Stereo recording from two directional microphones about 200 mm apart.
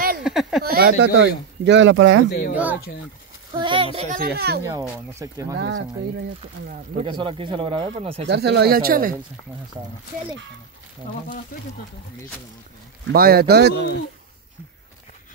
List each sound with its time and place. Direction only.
0.2 s a sound: centre (ahead or behind)
0.7 s speech: 50° right (ahead or behind); by 2.2 s 70° right (ahead or behind)
2.2 s speech: 55° left (ahead or behind)
2.5 s speech: 10° right (ahead or behind)
3.5 s speech: 25° right (ahead or behind)
4.1 s speech: 50° right (ahead or behind)
4.6 s speech: 15° right (ahead or behind)
7.1 s speech: 25° right (ahead or behind)
8.3 s speech: 55° right (ahead or behind)
13.1 s speech: 50° right (ahead or behind)